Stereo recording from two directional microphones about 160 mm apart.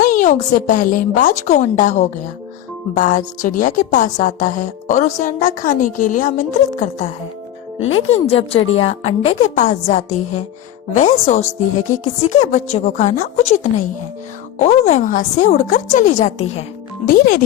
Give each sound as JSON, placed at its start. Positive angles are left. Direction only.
{"t": 0.0, "sound": "a woman's voice", "side_deg": 55}
{"t": 17.1, "sound": "a child's voice", "side_deg": 60}